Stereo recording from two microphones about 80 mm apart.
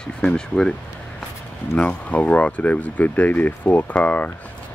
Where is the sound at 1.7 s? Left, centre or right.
Centre.